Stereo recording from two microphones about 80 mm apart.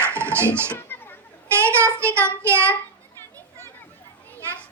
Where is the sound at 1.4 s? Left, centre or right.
Right.